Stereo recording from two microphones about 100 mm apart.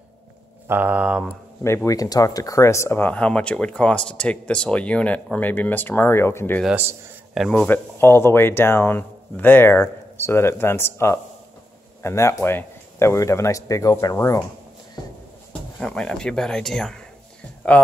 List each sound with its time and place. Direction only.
0.7 s speech: 15° right (ahead or behind)
1.9 s speech: 35° left (ahead or behind)
6.7 s a man's voice: 20° right (ahead or behind)
7.3 s speech: centre (ahead or behind)
7.6 s speech: 20° left (ahead or behind)
15.8 s speech: 10° left (ahead or behind)